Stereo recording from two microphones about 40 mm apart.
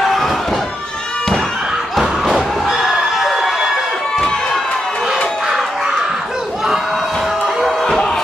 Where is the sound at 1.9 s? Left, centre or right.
Centre.